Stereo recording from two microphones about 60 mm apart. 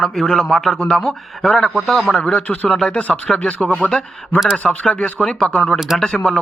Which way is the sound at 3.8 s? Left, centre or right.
Left.